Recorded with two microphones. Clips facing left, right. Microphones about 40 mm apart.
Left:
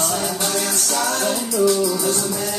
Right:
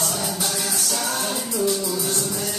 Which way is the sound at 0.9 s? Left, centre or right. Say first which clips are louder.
Left 6 dB; left.